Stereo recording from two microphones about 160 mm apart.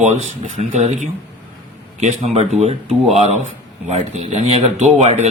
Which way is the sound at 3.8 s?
40° right (ahead or behind).